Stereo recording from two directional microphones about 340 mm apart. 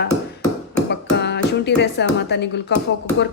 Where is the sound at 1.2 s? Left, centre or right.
Left.